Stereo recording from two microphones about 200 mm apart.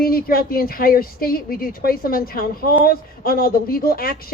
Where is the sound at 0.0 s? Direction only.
45° left (ahead or behind).